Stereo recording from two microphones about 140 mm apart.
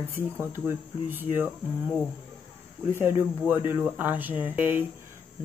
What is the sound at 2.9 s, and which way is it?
Speech, 15° right (ahead or behind).